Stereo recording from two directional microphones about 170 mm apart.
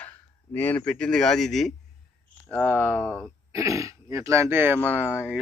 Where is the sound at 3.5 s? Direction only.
20° right (ahead or behind).